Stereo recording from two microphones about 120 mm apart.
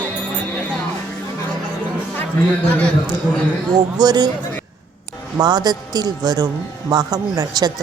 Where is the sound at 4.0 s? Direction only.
35° right (ahead or behind).